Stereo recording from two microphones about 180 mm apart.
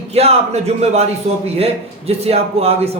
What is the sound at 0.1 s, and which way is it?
A man's voice, 35° right (ahead or behind).